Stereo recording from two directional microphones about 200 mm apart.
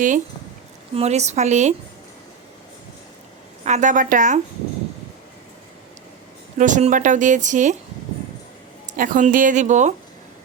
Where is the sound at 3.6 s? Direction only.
35° right (ahead or behind).